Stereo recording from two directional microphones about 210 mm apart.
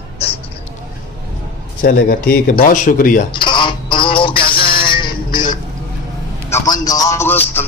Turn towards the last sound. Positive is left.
turn(degrees=10)  # may be behind; listen again after turning